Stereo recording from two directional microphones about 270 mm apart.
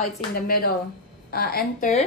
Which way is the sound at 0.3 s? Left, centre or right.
Left.